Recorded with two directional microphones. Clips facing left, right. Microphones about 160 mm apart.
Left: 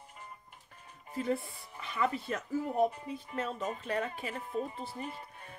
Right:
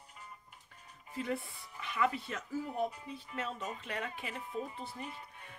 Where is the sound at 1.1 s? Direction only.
35° left (ahead or behind).